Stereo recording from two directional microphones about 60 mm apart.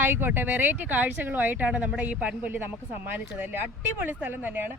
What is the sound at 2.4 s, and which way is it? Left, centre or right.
A woman's voice, right.